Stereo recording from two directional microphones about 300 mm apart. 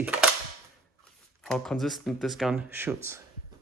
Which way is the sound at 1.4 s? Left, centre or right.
Centre.